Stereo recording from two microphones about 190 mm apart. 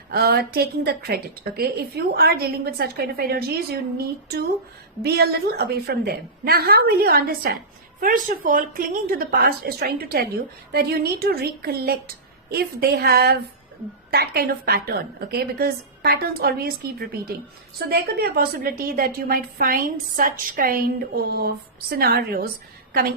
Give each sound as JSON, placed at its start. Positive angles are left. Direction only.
{"t": 0.1, "sound": "a woman's voice", "side_deg": -55}